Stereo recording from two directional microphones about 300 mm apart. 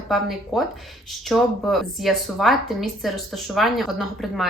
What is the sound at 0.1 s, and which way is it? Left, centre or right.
Speech, centre.